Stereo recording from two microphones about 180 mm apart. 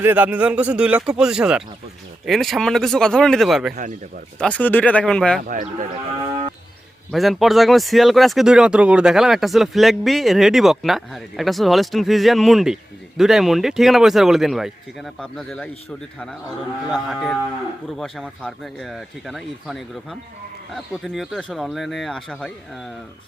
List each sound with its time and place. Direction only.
0.0 s speech: 10° right (ahead or behind)
5.4 s speech: 50° right (ahead or behind)
7.1 s speech: centre (ahead or behind)